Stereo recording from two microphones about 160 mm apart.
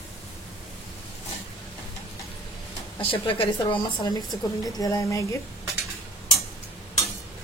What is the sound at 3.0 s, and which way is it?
A woman's voice, 35° left (ahead or behind).